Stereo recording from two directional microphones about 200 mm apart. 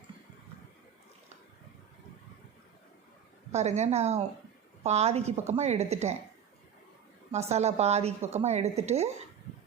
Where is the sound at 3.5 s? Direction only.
35° right (ahead or behind).